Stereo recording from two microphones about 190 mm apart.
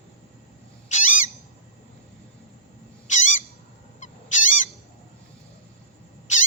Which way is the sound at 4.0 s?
40° left (ahead or behind).